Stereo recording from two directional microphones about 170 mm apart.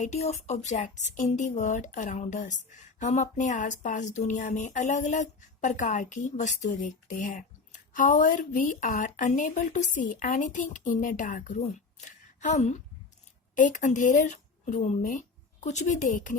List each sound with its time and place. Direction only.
0.0 s a woman's voice: 40° left (ahead or behind)